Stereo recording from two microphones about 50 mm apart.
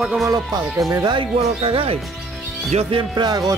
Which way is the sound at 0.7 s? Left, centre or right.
Right.